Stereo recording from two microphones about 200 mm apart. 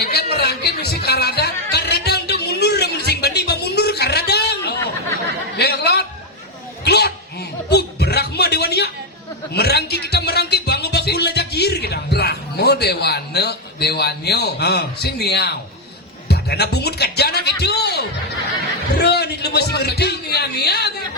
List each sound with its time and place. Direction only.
0.0 s music: 55° left (ahead or behind)
5.5 s chuckle: 55° left (ahead or behind)
6.8 s music: 55° left (ahead or behind)
16.3 s a man's voice: 55° left (ahead or behind)